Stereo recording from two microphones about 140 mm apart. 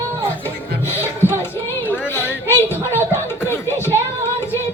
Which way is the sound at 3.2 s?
15° left (ahead or behind).